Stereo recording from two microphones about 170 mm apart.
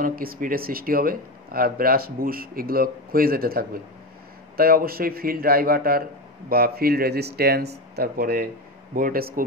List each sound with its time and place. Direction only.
0.0 s speech: 60° right (ahead or behind)